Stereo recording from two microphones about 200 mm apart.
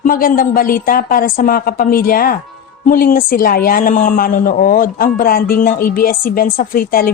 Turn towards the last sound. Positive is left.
turn(degrees=45)  # may be behind; listen again after turning